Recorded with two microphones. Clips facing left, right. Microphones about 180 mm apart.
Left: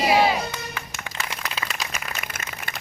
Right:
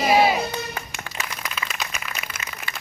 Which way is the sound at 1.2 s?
35° left (ahead or behind).